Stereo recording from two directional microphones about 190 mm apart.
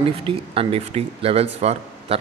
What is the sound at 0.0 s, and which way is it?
Speech, 30° right (ahead or behind).